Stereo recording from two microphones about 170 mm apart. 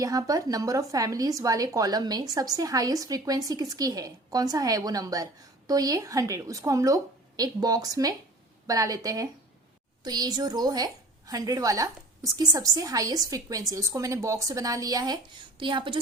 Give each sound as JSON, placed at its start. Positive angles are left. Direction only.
{"t": 0.0, "sound": "a woman's voice", "side_deg": -20}